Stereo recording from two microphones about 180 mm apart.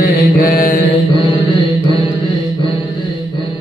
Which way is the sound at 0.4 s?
55° left (ahead or behind).